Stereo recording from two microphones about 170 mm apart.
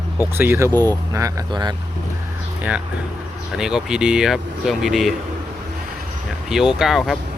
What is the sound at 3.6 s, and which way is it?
Speech, 5° right (ahead or behind).